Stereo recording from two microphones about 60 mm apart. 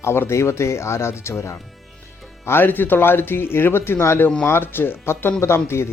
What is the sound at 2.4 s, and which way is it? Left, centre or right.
Speech, left.